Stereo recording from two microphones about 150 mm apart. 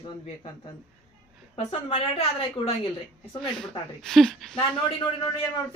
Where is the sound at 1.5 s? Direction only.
45° left (ahead or behind).